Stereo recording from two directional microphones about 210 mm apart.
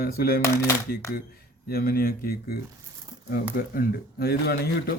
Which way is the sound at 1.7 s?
45° left (ahead or behind).